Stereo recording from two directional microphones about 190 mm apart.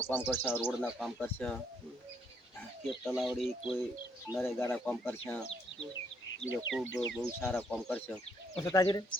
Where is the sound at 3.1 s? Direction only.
Centre (ahead or behind).